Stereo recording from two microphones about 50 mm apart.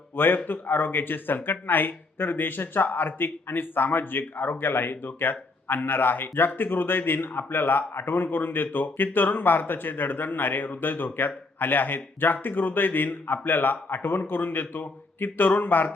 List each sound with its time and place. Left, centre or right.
0.2 s speech: left